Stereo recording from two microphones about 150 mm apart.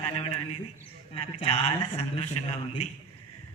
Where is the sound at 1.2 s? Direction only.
40° left (ahead or behind).